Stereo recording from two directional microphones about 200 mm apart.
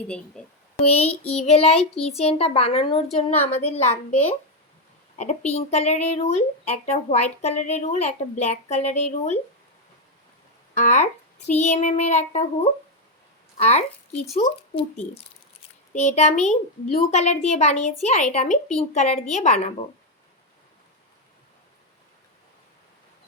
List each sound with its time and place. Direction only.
0.8 s a woman's voice: 30° left (ahead or behind)
10.8 s speech: 35° left (ahead or behind)
13.6 s speech: 30° left (ahead or behind)